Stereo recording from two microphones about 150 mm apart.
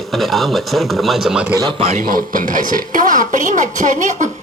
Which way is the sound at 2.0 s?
70° right (ahead or behind).